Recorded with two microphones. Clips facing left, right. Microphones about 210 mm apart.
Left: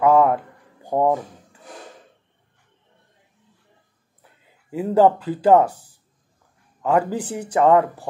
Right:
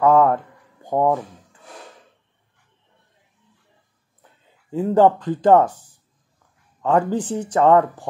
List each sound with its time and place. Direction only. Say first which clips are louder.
0.0 s a sound: even; 15° left (ahead or behind)
4.6 s speech: right 1 dB; 10° left (ahead or behind)
5.7 s speech: left 1 dB; 35° left (ahead or behind)
6.8 s speech: right 1 dB; 10° left (ahead or behind)